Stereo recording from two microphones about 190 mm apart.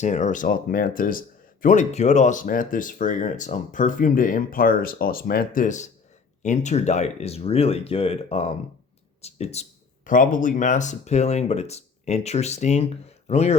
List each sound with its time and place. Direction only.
0.0 s speech: 40° left (ahead or behind)